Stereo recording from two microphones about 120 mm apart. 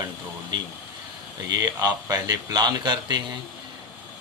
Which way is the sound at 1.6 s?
30° right (ahead or behind).